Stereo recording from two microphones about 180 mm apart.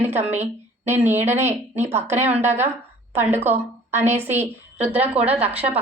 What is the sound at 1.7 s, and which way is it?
Speech, 40° right (ahead or behind).